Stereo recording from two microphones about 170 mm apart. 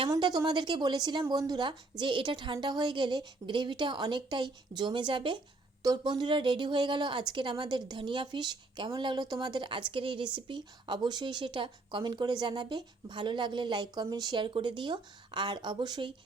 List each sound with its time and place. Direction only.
0.1 s speech: 25° right (ahead or behind)